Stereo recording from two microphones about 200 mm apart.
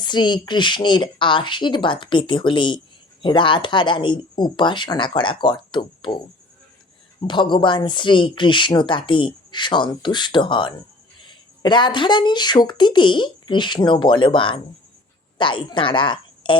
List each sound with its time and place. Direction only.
0.0 s speech: 20° left (ahead or behind)